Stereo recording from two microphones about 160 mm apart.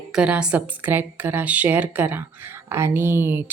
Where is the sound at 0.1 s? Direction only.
5° right (ahead or behind).